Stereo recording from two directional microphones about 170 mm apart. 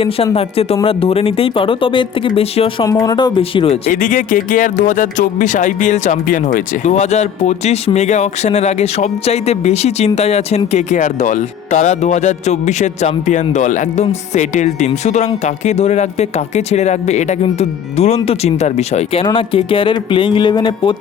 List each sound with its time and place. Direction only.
0.3 s speech: 35° left (ahead or behind)
2.8 s speech: 20° left (ahead or behind)